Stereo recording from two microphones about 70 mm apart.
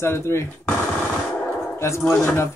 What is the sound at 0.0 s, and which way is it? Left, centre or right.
Speech, left.